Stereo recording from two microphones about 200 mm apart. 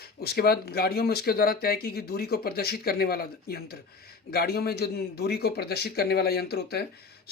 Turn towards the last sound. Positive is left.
turn(degrees=50)  # may be behind; listen again after turning